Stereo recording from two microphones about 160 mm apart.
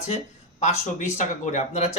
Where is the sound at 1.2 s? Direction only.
45° left (ahead or behind).